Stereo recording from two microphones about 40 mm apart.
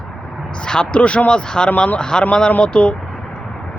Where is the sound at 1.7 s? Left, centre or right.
Left.